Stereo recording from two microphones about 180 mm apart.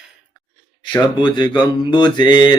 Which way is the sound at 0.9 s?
25° left (ahead or behind).